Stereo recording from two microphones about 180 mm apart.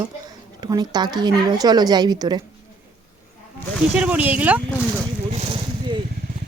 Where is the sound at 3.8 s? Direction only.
5° right (ahead or behind).